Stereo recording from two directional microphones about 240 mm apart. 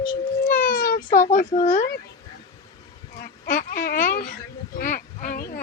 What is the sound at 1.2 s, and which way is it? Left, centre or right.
Speech, left.